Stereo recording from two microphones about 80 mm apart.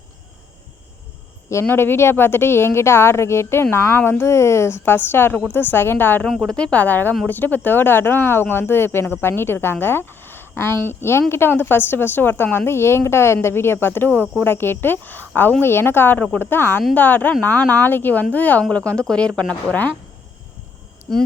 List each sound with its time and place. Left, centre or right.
1.6 s a woman's voice: left
6.2 s speech: centre
6.6 s a woman's voice: centre